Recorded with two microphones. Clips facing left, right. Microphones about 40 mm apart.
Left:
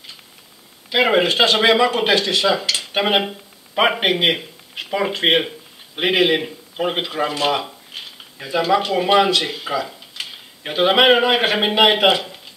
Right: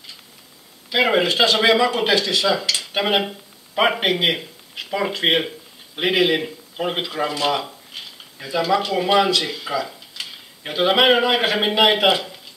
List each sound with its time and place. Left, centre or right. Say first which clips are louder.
0.8 s speech: left 2 dB; centre